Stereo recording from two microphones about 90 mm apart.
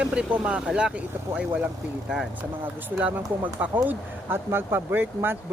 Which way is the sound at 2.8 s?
20° right (ahead or behind).